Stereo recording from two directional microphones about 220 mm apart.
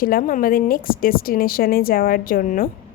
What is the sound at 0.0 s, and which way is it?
A woman's voice, 40° left (ahead or behind).